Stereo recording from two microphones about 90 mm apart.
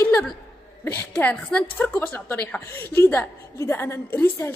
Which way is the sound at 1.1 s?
15° left (ahead or behind).